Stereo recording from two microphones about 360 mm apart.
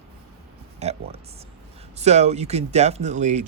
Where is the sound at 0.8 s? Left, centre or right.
Centre.